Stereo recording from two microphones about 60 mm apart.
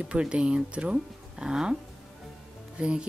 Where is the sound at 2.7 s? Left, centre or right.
Centre.